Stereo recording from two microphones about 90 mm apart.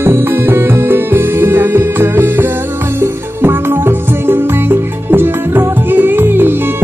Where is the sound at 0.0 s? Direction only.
25° right (ahead or behind).